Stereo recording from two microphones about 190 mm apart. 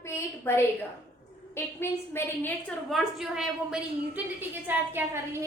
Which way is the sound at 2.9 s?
Centre (ahead or behind).